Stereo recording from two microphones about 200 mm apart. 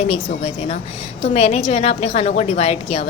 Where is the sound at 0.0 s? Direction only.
35° left (ahead or behind).